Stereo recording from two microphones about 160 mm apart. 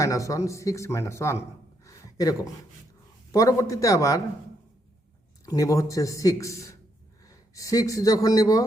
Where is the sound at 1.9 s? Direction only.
20° left (ahead or behind).